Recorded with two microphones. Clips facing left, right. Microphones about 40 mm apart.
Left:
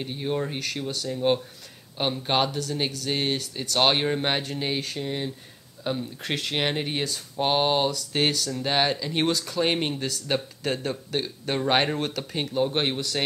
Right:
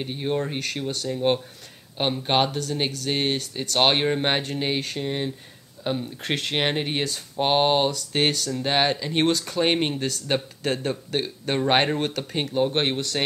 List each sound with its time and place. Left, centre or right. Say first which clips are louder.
0.0 s speech: right 2 dB; centre